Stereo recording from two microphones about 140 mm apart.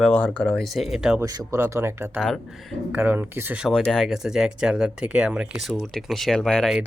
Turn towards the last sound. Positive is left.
turn(degrees=5)  # may be behind; listen again after turning